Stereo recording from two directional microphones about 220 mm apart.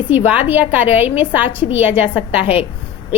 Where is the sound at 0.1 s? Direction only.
10° right (ahead or behind).